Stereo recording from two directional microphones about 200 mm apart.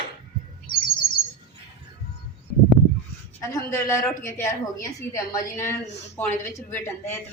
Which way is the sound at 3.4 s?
15° left (ahead or behind).